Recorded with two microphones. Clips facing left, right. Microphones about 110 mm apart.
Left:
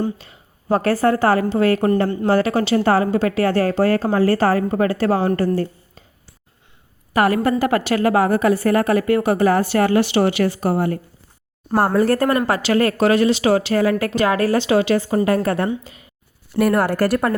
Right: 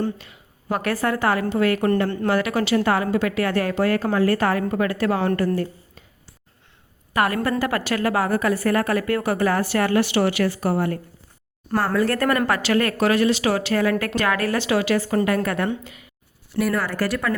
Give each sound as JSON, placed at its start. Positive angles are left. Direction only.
{"t": 0.2, "sound": "a sound", "side_deg": 35}
{"t": 1.0, "sound": "speech", "side_deg": 30}
{"t": 7.1, "sound": "a woman's voice", "side_deg": 30}
{"t": 16.6, "sound": "speech", "side_deg": 55}